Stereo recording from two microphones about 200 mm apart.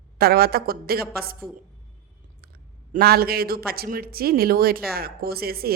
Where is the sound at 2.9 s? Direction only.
50° right (ahead or behind).